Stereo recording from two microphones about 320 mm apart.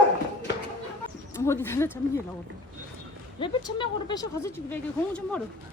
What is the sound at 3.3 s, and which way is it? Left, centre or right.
Speech, centre.